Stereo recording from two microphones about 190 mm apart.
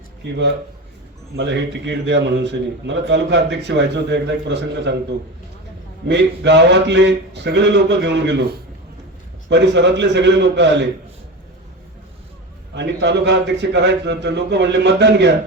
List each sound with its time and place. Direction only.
1.4 s a man's voice: 65° right (ahead or behind)
6.1 s a man's voice: 65° right (ahead or behind)
9.5 s a man's voice: 65° right (ahead or behind)
12.7 s a man's voice: 65° right (ahead or behind)